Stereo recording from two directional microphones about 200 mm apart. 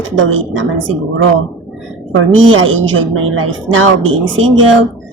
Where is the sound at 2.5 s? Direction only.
75° right (ahead or behind).